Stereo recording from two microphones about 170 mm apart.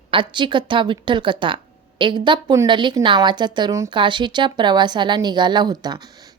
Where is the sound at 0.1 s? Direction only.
30° right (ahead or behind).